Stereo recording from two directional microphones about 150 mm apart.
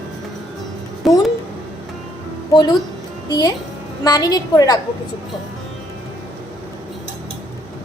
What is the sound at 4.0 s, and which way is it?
Speech, 25° left (ahead or behind).